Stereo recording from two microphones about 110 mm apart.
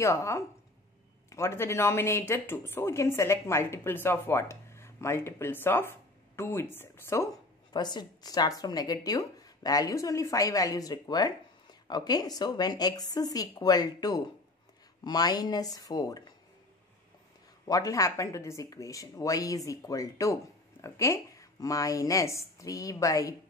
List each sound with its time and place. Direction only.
0.0 s speech: 25° left (ahead or behind)
7.7 s a woman's voice: 40° left (ahead or behind)
17.6 s a woman's voice: 35° left (ahead or behind)